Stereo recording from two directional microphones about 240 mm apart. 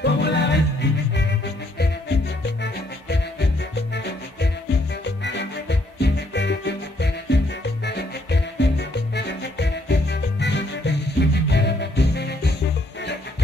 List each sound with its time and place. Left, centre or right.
0.0 s music: left
2.6 s music: left